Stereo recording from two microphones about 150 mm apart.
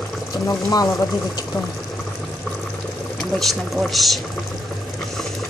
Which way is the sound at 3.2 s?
5° left (ahead or behind).